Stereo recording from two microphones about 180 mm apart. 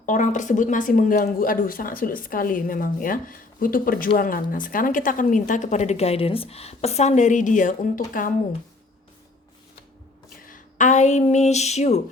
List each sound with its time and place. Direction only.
0.0 s speech: 45° left (ahead or behind)
10.2 s a woman's voice: 50° left (ahead or behind)